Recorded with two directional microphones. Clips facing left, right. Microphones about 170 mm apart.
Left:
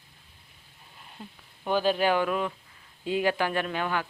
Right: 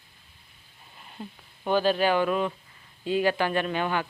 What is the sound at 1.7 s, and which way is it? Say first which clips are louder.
Speech: right 1 dB; 10° left (ahead or behind).